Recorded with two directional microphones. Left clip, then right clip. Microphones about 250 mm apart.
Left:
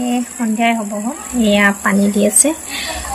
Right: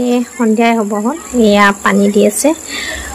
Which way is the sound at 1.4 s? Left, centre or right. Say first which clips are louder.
Right 4 dB; centre.